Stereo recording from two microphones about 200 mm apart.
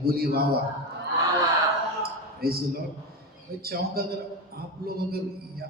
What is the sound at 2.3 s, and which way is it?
A man's voice, 50° right (ahead or behind).